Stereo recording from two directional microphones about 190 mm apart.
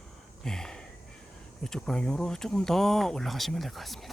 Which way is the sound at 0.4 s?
5° left (ahead or behind).